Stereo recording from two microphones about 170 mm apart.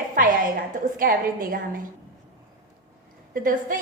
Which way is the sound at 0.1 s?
50° right (ahead or behind).